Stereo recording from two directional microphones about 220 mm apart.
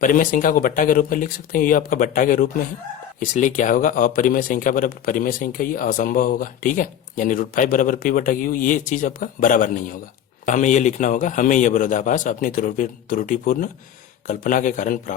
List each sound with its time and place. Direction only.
0.0 s speech: 40° left (ahead or behind)